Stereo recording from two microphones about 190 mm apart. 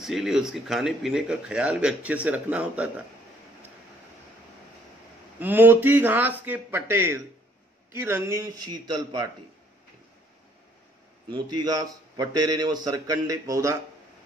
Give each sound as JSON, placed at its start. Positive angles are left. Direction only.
{"t": 0.0, "sound": "speech", "side_deg": 0}
{"t": 5.4, "sound": "a man's voice", "side_deg": -10}
{"t": 11.2, "sound": "a man's voice", "side_deg": -25}